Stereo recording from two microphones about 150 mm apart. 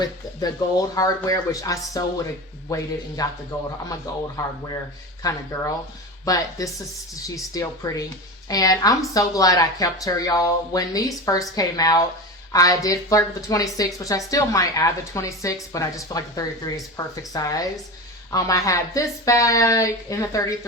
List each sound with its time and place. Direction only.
0.0 s a woman's voice: 25° left (ahead or behind)